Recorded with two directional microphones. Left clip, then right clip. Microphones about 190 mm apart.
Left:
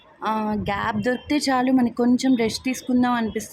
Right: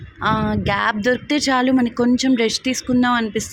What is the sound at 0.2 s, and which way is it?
Speech, 10° right (ahead or behind).